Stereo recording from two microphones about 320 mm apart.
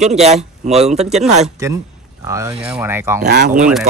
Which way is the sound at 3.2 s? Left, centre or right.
Right.